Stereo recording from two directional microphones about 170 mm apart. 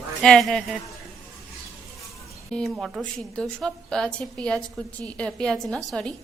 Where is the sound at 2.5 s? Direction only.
5° left (ahead or behind).